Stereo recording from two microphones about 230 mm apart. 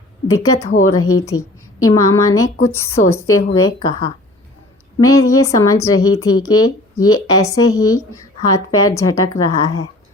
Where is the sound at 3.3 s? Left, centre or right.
Left.